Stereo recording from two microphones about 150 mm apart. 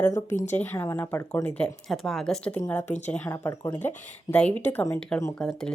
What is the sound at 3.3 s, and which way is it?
Speech, 25° left (ahead or behind).